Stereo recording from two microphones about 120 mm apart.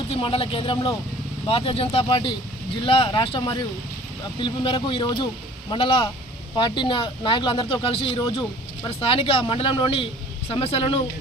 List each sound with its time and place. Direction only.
0.1 s speech: 50° left (ahead or behind)